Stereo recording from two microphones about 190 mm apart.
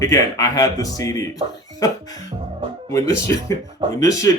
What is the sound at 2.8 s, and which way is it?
Speech, 15° left (ahead or behind).